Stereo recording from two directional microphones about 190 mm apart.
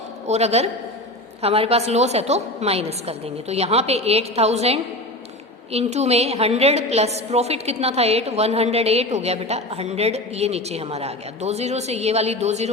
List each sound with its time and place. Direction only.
0.3 s a woman's voice: 35° right (ahead or behind)